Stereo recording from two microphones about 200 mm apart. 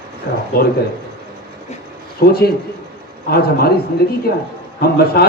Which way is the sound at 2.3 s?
50° left (ahead or behind).